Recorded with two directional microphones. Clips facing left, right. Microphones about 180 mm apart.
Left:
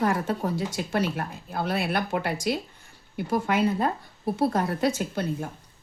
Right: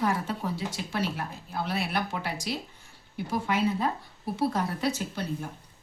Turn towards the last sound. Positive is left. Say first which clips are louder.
# left 4 dB
turn(degrees=50)  # may be behind; listen again after turning